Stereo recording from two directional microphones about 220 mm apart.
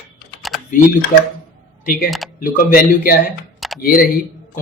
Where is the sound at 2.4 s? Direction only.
40° left (ahead or behind).